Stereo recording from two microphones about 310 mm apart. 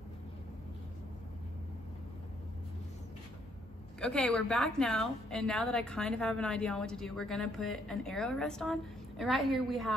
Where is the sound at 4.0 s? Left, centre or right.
Centre.